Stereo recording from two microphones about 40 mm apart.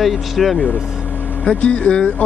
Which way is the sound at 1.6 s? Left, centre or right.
Left.